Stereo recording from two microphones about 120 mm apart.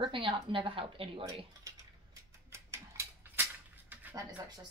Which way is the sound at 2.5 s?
20° right (ahead or behind).